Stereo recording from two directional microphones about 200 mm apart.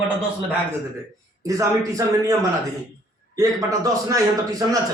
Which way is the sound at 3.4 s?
15° right (ahead or behind).